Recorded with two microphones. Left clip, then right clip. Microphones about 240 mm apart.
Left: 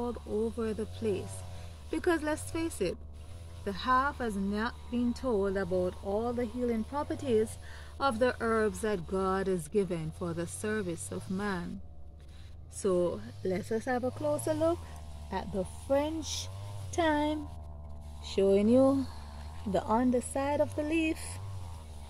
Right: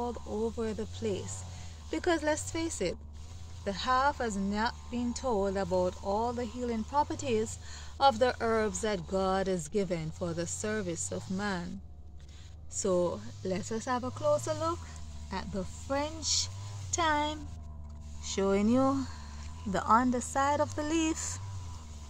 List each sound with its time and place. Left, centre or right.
0.6 s speech: centre
12.7 s speech: centre
15.9 s speech: centre
18.6 s speech: centre
19.8 s a woman's voice: right